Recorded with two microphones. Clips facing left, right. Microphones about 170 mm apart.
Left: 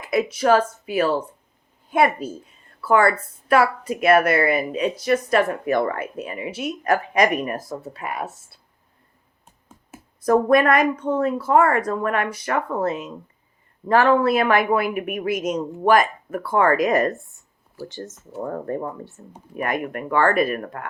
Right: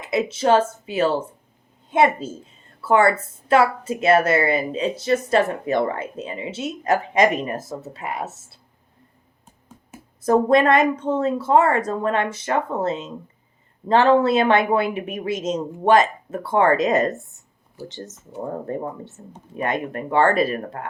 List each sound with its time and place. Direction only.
0.0 s a woman's voice: 25° right (ahead or behind)
10.2 s a woman's voice: 25° right (ahead or behind)
18.1 s speech: centre (ahead or behind)
18.4 s a woman's voice: 25° right (ahead or behind)